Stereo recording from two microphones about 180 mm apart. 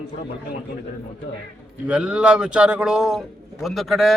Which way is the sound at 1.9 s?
5° right (ahead or behind).